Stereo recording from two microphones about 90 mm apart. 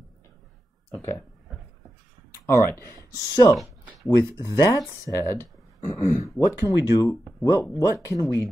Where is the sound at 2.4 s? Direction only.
30° left (ahead or behind).